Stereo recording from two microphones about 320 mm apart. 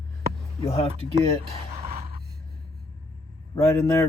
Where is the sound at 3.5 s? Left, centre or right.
Centre.